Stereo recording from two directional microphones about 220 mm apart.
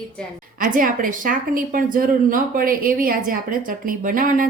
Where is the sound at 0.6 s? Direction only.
40° right (ahead or behind).